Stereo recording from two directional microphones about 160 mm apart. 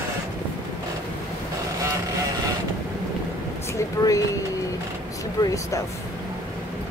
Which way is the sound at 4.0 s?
20° left (ahead or behind).